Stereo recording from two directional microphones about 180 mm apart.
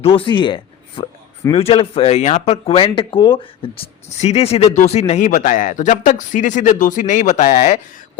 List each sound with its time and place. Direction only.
0.0 s speech: 30° left (ahead or behind)